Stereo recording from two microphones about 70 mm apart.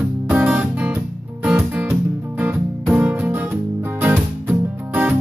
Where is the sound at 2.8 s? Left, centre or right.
Right.